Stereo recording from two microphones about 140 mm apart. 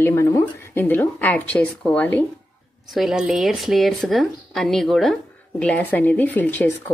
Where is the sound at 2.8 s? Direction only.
Centre (ahead or behind); by 6.9 s 15° left (ahead or behind).